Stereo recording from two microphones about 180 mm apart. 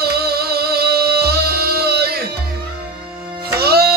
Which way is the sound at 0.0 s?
60° right (ahead or behind).